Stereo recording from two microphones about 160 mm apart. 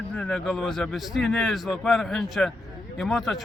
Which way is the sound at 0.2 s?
5° left (ahead or behind).